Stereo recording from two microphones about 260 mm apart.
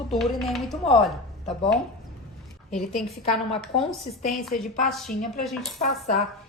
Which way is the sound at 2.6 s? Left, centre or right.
Centre.